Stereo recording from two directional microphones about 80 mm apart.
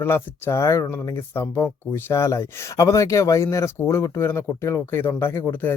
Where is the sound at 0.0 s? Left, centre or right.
Left.